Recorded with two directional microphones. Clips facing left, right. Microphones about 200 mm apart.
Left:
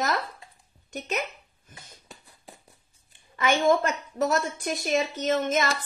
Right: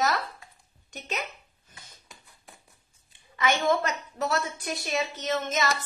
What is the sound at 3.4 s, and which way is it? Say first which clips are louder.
A woman's voice: left 3 dB; 45° left (ahead or behind).